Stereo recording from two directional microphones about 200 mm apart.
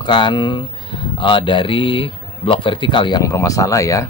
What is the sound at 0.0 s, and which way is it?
Speech, 20° left (ahead or behind).